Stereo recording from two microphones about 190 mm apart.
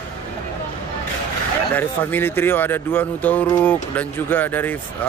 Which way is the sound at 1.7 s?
10° left (ahead or behind).